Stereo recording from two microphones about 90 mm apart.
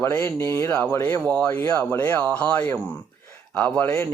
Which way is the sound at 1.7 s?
20° left (ahead or behind).